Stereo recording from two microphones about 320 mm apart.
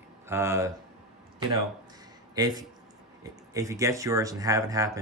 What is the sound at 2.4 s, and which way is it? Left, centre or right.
Speech, centre.